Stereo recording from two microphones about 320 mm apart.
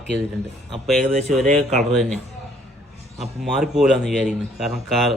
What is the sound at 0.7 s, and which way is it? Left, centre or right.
Speech, centre.